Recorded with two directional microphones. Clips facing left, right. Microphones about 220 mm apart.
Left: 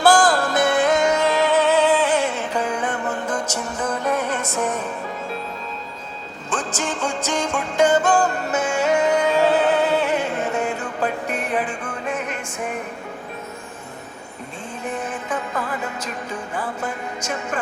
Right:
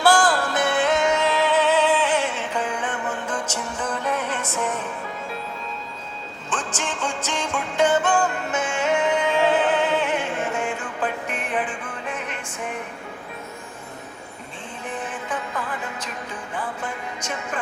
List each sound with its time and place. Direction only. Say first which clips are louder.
0.0 s music: left 3 dB; 45° left (ahead or behind)
6.5 s music: left 4 dB; 40° left (ahead or behind)
16.8 s music: left 3 dB; 40° left (ahead or behind)